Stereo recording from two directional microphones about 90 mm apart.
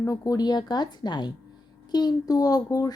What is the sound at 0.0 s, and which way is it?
A woman's voice, 40° left (ahead or behind).